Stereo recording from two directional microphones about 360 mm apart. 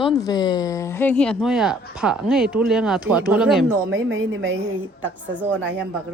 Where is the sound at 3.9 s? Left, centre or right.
Right.